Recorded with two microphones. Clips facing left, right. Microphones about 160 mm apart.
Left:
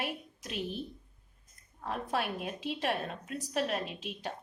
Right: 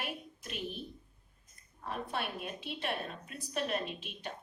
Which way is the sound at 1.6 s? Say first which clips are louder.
Left 3 dB; 90° left.